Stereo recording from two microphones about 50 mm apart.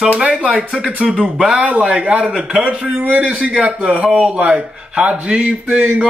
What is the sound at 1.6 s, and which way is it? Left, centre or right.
A man's voice, right.